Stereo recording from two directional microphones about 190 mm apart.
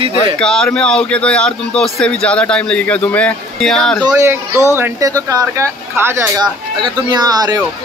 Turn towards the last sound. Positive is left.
turn(degrees=-20)  # may be behind; listen again after turning